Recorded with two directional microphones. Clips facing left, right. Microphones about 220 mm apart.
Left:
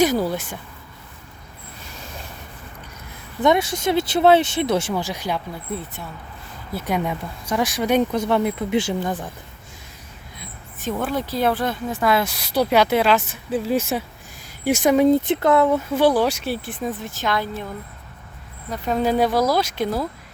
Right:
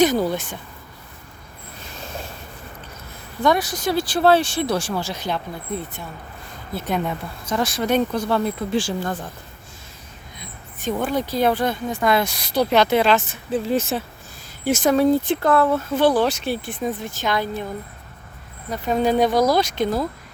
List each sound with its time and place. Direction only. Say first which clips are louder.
0.0 s speech: right 1 dB; 5° left (ahead or behind)
3.4 s speech: left 2 dB; 25° left (ahead or behind)
6.7 s speech: even; 10° left (ahead or behind)
10.3 s speech: even; 5° left (ahead or behind)
18.7 s speech: right 1 dB; centre (ahead or behind)